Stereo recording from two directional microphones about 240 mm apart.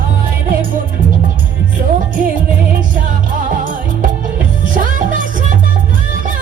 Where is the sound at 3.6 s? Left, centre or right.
Right.